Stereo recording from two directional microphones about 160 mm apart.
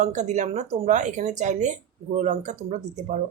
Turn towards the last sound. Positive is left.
turn(degrees=-45)  # may be behind; listen again after turning